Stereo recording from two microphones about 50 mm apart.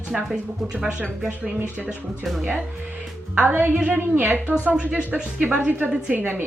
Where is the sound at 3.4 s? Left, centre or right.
Right.